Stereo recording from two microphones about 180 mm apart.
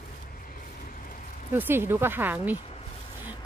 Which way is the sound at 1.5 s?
10° right (ahead or behind).